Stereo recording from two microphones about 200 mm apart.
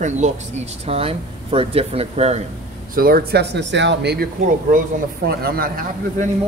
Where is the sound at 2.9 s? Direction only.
50° right (ahead or behind).